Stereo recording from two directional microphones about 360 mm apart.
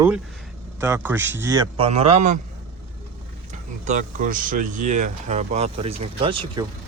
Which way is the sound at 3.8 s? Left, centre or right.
Right.